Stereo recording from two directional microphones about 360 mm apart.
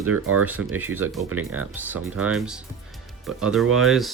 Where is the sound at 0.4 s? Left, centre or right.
Centre.